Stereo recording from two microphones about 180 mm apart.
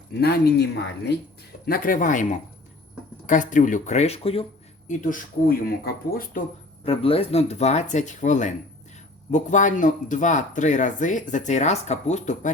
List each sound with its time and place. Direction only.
0.2 s speech: 65° left (ahead or behind)
1.6 s speech: 55° left (ahead or behind); by 4.4 s 30° left (ahead or behind)
4.9 s speech: 45° left (ahead or behind)
6.8 s speech: 30° left (ahead or behind)